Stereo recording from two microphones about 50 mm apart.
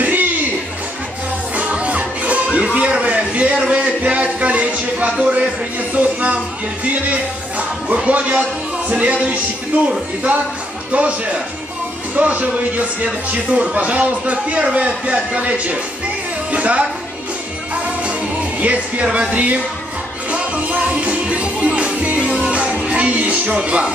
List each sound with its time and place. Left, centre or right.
0.0 s a sound: right
1.6 s music: right
2.5 s a sound: right
5.2 s speech: right
8.4 s music: right
10.9 s a woman's voice: right
18.6 s speech: right
19.0 s speech: centre
19.3 s speech: right
20.2 s music: right